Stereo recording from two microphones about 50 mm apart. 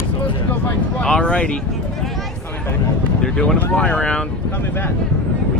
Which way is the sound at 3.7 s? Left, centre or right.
Left.